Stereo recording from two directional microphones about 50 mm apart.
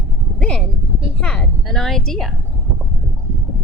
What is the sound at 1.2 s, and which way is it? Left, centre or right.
A woman's voice, centre.